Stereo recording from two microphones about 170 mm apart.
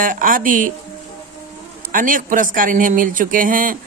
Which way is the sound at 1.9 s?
55° right (ahead or behind).